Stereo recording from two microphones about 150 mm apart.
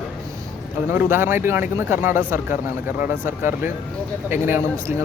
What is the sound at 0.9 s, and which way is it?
Speech, 15° right (ahead or behind).